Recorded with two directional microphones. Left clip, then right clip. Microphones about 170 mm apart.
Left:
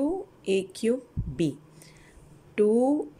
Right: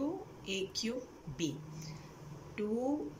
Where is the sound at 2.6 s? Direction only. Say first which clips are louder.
Left 16 dB; 65° left (ahead or behind).